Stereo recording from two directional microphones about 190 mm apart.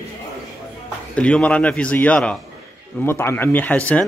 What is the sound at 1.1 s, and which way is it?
Speech, 5° left (ahead or behind).